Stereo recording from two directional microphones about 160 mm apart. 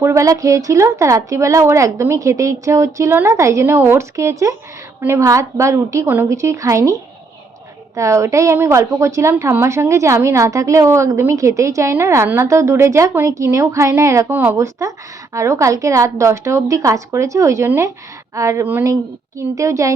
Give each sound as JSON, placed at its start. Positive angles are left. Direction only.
{"t": 0.0, "sound": "a woman's voice", "side_deg": -20}
{"t": 7.9, "sound": "a woman's voice", "side_deg": -20}